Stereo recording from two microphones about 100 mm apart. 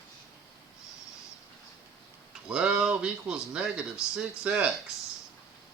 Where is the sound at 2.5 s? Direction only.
10° right (ahead or behind).